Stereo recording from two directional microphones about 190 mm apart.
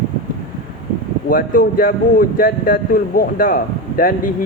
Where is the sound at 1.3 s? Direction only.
50° left (ahead or behind).